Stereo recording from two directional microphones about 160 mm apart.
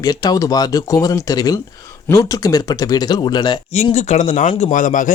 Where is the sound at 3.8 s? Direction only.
45° left (ahead or behind).